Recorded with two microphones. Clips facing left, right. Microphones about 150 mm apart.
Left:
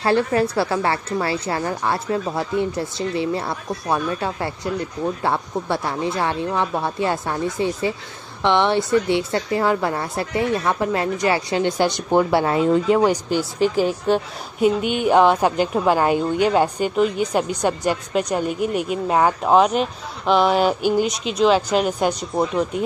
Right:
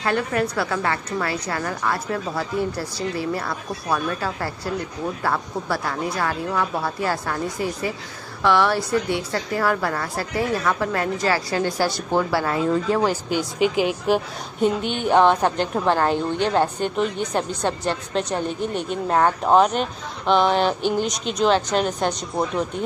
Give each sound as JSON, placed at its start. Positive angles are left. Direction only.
{"t": 0.0, "sound": "a woman's voice", "side_deg": 30}
{"t": 13.6, "sound": "speech", "side_deg": 35}
{"t": 14.6, "sound": "a woman's voice", "side_deg": 10}